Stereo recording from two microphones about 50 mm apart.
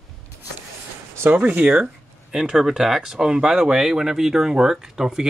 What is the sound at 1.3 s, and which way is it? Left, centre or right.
Speech, right.